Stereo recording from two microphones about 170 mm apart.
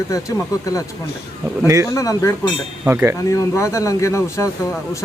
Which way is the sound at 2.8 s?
15° right (ahead or behind).